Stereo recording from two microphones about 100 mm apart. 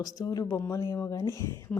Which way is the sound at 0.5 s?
30° left (ahead or behind).